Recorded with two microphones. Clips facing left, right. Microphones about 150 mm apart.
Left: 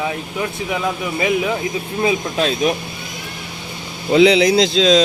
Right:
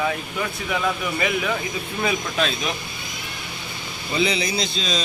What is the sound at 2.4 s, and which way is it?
Speech, 40° left (ahead or behind).